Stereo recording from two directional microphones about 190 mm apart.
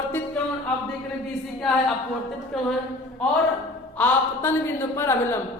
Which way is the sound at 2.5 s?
Centre (ahead or behind).